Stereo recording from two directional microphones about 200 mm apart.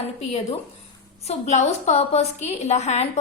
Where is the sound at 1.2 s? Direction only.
35° left (ahead or behind).